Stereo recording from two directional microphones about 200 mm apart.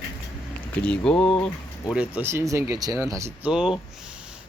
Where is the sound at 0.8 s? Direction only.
5° left (ahead or behind).